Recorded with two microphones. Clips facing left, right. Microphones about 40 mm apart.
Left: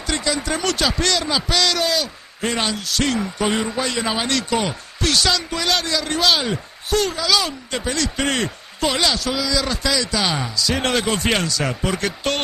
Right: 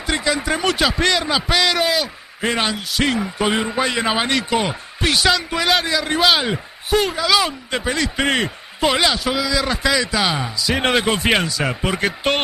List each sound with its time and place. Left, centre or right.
0.0 s speech: centre